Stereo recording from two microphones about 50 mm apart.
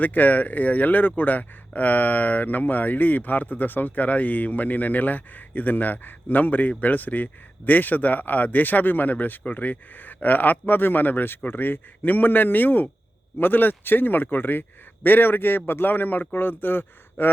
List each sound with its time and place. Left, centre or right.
0.0 s a man's voice: left